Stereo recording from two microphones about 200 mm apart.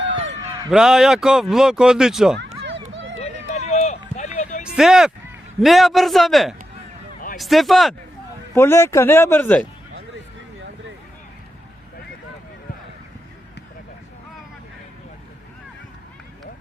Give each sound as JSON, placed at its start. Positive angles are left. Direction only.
{"t": 0.0, "sound": "a sound", "side_deg": -65}
{"t": 0.7, "sound": "speech", "side_deg": -5}
{"t": 2.9, "sound": "run", "side_deg": -70}
{"t": 3.2, "sound": "run", "side_deg": 35}
{"t": 4.2, "sound": "music", "side_deg": 35}
{"t": 4.6, "sound": "speech", "side_deg": 0}
{"t": 8.5, "sound": "speech", "side_deg": 10}